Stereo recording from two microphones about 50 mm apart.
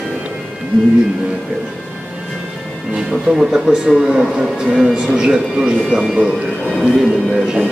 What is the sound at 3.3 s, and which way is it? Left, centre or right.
Speech, centre.